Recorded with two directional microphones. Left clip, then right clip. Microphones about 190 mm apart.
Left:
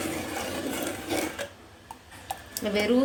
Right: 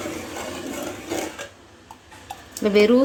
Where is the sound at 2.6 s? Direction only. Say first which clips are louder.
Right 11 dB; 55° right (ahead or behind).